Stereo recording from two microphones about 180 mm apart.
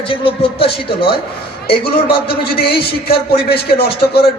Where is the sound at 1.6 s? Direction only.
60° left (ahead or behind).